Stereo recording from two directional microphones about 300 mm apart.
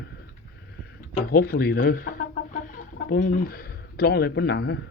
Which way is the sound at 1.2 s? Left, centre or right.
Left.